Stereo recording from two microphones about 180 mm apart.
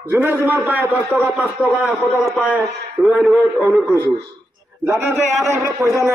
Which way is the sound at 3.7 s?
10° left (ahead or behind).